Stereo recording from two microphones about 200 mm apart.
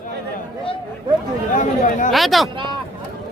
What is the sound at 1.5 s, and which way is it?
Speech, 40° left (ahead or behind).